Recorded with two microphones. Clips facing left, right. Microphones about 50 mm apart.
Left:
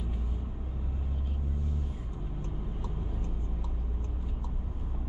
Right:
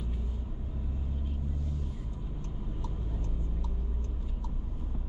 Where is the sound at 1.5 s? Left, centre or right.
Left.